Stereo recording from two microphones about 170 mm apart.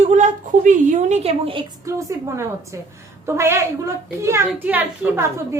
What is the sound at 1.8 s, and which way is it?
A woman's voice, 15° right (ahead or behind).